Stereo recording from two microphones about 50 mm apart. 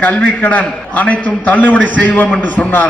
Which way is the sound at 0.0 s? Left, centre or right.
Left.